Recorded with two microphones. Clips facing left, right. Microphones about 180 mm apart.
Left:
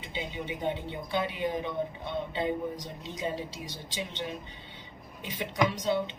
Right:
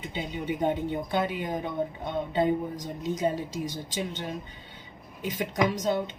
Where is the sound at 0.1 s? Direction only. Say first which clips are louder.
Right 3 dB; 45° right (ahead or behind).